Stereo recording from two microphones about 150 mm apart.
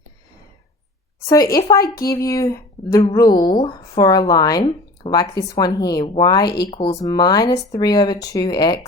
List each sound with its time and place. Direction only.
1.3 s speech: 25° left (ahead or behind)
6.7 s speech: 40° left (ahead or behind)
7.0 s speech: 25° left (ahead or behind)